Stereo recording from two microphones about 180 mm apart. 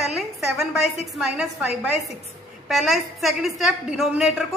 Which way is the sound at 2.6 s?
Centre (ahead or behind).